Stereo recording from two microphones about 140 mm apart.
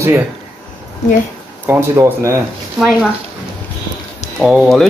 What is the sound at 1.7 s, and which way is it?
Speech, 20° right (ahead or behind).